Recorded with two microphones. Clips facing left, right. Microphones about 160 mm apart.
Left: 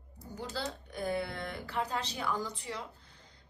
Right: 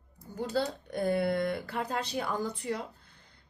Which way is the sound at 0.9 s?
55° right (ahead or behind).